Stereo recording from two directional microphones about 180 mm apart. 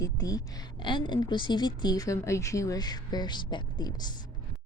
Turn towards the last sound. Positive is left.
turn(degrees=25)  # may be behind; listen again after turning